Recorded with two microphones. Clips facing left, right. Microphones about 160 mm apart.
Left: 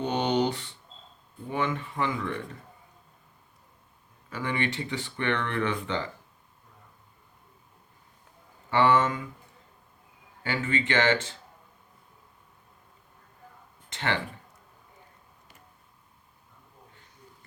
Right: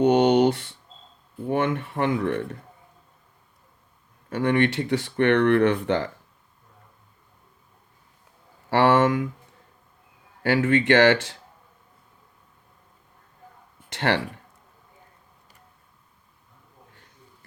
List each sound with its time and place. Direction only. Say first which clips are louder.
0.0 s a sound: right 9 dB; 75° right (ahead or behind)
1.5 s speech: right 6 dB; 65° right (ahead or behind)
4.3 s speech: right 9 dB; 65° right (ahead or behind)
8.7 s speech: right 4 dB; 85° right
10.4 s speech: right 9 dB; 65° right (ahead or behind)
14.1 s speech: right 6 dB; 70° right (ahead or behind)